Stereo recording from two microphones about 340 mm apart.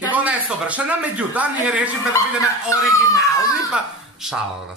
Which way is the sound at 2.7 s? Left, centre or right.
Centre.